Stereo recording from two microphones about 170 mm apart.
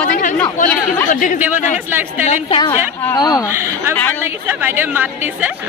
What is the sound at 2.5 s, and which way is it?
Speech, 30° left (ahead or behind).